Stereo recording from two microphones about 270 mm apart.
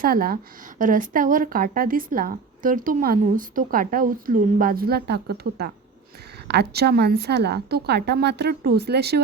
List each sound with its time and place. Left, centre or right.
0.0 s speech: right